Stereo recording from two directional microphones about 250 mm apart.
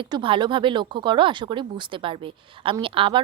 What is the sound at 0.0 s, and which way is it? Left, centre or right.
Speech, centre.